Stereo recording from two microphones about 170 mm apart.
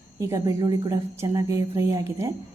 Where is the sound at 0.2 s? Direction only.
20° right (ahead or behind).